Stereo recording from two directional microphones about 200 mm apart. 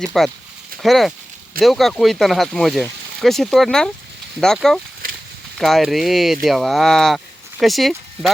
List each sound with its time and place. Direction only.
0.0 s speech: centre (ahead or behind)